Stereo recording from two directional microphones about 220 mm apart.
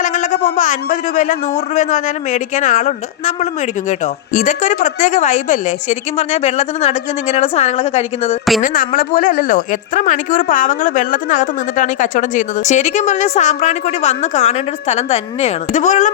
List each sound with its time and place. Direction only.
0.0 s a man's voice: 35° left (ahead or behind)
8.6 s a man's voice: 40° left (ahead or behind)